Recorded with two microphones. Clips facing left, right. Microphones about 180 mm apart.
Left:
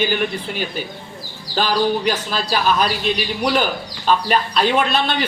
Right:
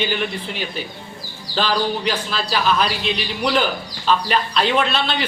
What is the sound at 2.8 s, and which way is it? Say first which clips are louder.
Speech: left 2 dB; 45° left (ahead or behind).